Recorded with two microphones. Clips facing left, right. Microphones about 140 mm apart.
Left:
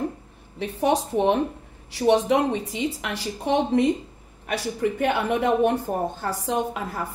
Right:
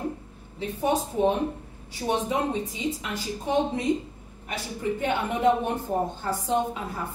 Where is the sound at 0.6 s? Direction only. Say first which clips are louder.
Left 3 dB; 80° left.